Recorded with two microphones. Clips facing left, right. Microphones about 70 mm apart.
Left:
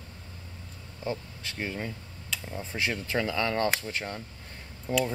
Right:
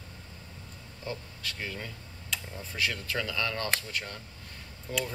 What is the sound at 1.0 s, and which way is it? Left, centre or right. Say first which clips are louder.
Speech: left 4 dB; left.